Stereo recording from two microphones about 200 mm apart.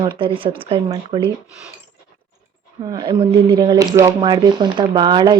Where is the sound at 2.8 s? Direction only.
20° right (ahead or behind).